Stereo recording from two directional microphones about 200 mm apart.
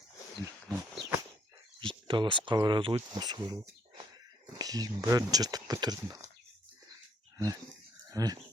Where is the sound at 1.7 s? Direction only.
25° right (ahead or behind).